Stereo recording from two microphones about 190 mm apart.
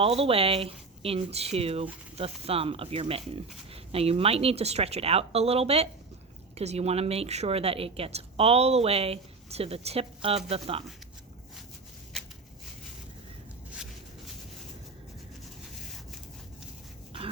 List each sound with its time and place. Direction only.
0.0 s speech: 30° right (ahead or behind)